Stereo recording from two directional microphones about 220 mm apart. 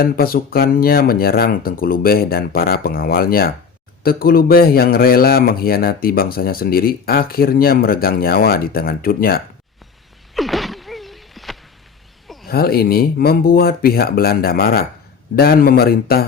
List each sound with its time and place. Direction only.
0.0 s speech: 40° left (ahead or behind)
10.3 s a sound: centre (ahead or behind)
12.5 s speech: 45° left (ahead or behind)